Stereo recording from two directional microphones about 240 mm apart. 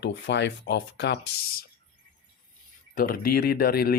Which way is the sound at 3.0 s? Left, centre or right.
Left.